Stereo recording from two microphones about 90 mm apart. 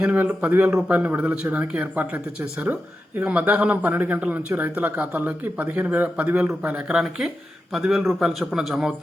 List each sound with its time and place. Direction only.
0.3 s a man's voice: 15° right (ahead or behind)